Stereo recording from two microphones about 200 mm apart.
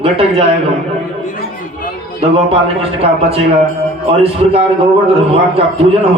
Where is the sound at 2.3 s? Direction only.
30° right (ahead or behind).